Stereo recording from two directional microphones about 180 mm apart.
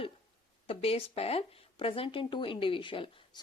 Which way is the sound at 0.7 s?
30° left (ahead or behind).